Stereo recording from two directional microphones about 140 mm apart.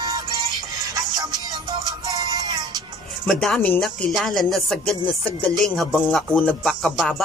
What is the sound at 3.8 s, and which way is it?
Speech, centre (ahead or behind).